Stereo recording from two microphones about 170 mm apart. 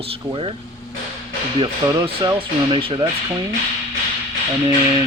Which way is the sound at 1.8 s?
15° right (ahead or behind).